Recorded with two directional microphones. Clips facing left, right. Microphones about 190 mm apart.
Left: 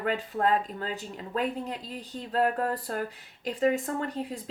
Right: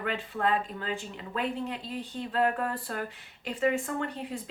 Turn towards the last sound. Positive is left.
turn(degrees=40)  # may be behind; listen again after turning